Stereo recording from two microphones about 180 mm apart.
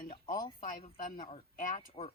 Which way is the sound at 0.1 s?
25° left (ahead or behind).